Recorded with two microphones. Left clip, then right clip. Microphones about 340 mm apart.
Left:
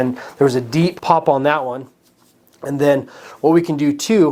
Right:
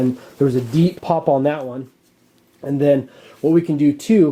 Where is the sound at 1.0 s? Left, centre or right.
Left.